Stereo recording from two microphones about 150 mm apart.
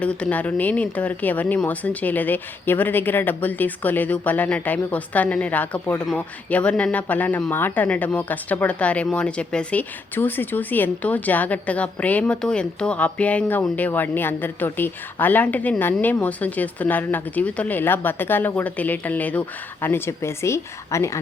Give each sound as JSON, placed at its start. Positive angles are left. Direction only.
{"t": 0.0, "sound": "speech", "side_deg": 10}